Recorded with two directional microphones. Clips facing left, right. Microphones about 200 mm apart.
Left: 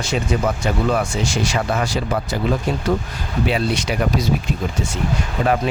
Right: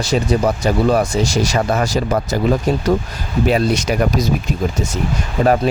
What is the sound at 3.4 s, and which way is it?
Speech, 45° right (ahead or behind).